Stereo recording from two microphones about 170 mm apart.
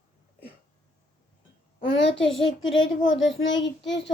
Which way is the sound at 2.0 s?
90° left.